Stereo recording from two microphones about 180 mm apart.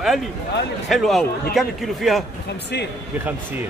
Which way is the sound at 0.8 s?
Centre (ahead or behind).